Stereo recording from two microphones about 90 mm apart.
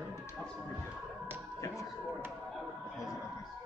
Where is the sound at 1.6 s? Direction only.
35° left (ahead or behind).